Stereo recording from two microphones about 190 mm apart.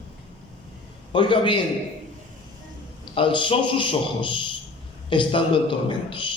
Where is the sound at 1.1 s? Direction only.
25° left (ahead or behind).